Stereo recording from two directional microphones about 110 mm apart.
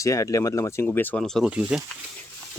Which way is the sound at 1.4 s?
10° right (ahead or behind).